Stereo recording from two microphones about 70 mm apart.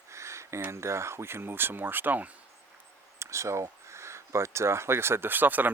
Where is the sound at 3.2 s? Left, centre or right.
Right.